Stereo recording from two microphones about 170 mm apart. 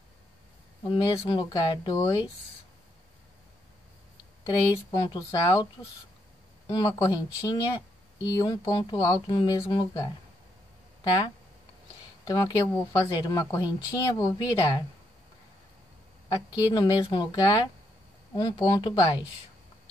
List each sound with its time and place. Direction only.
0.8 s speech: 25° left (ahead or behind)
4.5 s speech: 20° left (ahead or behind)
6.7 s speech: 20° left (ahead or behind)
12.3 s speech: 25° left (ahead or behind)
16.5 s speech: 25° left (ahead or behind)